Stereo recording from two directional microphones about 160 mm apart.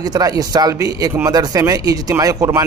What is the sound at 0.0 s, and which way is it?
Speech, 25° right (ahead or behind).